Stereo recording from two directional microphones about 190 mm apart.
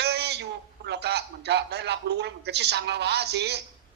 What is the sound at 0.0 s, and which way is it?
A man's voice, 60° right (ahead or behind).